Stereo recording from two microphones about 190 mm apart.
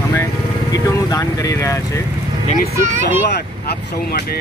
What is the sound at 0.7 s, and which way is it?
Speech, 20° left (ahead or behind).